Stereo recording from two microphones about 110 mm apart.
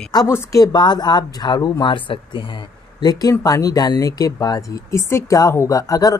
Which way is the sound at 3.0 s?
35° left (ahead or behind).